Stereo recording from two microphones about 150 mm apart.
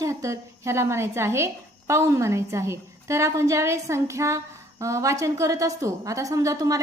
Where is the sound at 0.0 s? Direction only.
20° right (ahead or behind).